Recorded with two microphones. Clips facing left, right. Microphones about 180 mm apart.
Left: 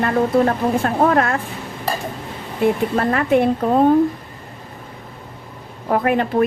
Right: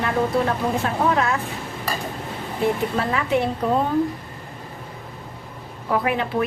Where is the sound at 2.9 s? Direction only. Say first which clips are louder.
Left 5 dB; 50° left (ahead or behind).